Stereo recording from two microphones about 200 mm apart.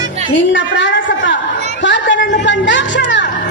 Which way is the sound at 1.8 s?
65° left (ahead or behind).